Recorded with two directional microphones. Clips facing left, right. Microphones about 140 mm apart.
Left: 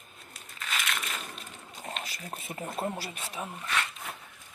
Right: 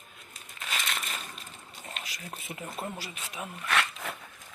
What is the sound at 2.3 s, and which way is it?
Speech, 30° left (ahead or behind).